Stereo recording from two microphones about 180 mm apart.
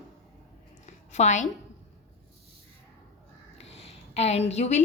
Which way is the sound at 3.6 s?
35° left (ahead or behind).